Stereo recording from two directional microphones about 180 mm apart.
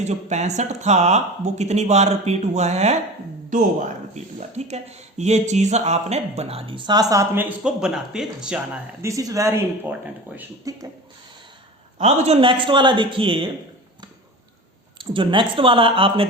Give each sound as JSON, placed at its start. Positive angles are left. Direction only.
{"t": 0.1, "sound": "speech", "side_deg": -40}
{"t": 4.1, "sound": "speech", "side_deg": -40}
{"t": 9.0, "sound": "speech", "side_deg": -20}
{"t": 10.7, "sound": "speech", "side_deg": -20}
{"t": 11.9, "sound": "speech", "side_deg": -35}
{"t": 14.9, "sound": "speech", "side_deg": -25}